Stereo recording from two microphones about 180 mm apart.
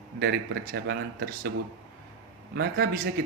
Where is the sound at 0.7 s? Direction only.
65° right (ahead or behind).